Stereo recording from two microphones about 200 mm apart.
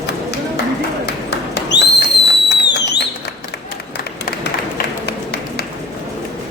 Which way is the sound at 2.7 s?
60° left (ahead or behind).